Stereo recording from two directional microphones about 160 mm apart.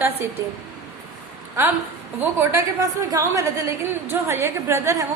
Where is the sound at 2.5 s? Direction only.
20° right (ahead or behind).